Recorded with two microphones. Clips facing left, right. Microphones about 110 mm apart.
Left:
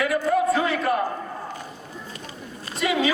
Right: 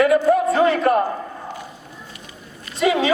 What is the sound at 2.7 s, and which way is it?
Speech, centre (ahead or behind).